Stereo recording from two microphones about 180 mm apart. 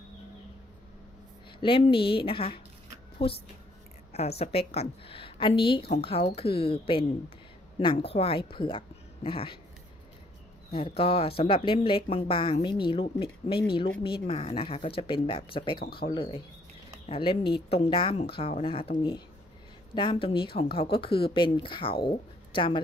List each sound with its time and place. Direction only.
1.6 s speech: 30° left (ahead or behind)
4.1 s a woman's voice: 35° left (ahead or behind)
10.7 s a woman's voice: 30° left (ahead or behind)
15.8 s speech: 60° left (ahead or behind)
16.1 s a woman's voice: 30° left (ahead or behind)